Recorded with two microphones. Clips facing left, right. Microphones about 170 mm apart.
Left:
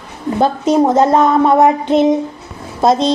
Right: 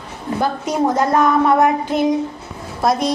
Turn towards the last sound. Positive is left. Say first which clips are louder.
# left 5 dB
turn(degrees=25)  # may be behind; listen again after turning